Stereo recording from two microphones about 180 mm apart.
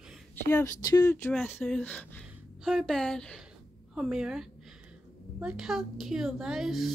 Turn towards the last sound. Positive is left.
turn(degrees=0)  # may be behind; listen again after turning